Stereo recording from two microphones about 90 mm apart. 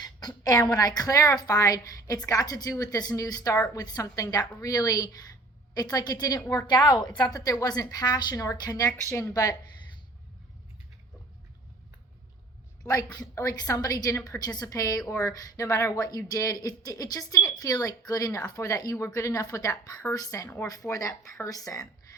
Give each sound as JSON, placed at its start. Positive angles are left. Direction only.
{"t": 0.0, "sound": "a woman's voice", "side_deg": 45}
{"t": 7.3, "sound": "a woman's voice", "side_deg": 40}
{"t": 9.0, "sound": "a woman's voice", "side_deg": 30}
{"t": 12.9, "sound": "a woman's voice", "side_deg": 40}